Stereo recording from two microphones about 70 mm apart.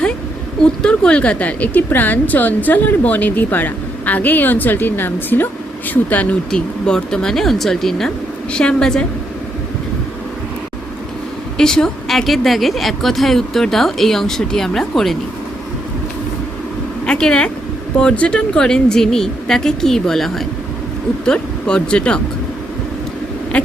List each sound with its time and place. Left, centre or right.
0.6 s a woman's voice: centre
6.5 s speech: centre
11.5 s speech: centre
17.1 s speech: centre
21.2 s speech: centre
23.5 s owl: centre